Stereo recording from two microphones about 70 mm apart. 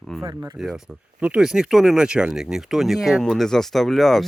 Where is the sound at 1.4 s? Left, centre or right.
Centre.